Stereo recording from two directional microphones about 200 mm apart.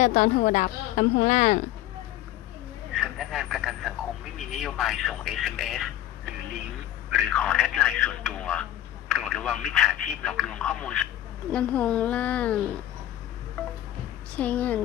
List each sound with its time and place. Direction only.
0.0 s a woman's voice: 40° left (ahead or behind)
2.9 s vehicle: centre (ahead or behind)
4.4 s a man's voice: centre (ahead or behind)
14.3 s a woman's voice: 5° left (ahead or behind)